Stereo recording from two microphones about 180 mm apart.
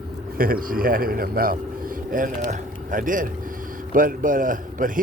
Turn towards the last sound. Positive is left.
turn(degrees=-45)  # may be behind; listen again after turning